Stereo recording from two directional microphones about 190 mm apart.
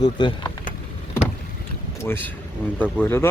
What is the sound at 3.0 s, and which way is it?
Speech, 10° left (ahead or behind).